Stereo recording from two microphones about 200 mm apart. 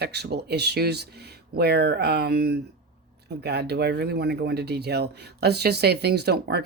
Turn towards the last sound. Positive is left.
turn(degrees=-55)  # may be behind; listen again after turning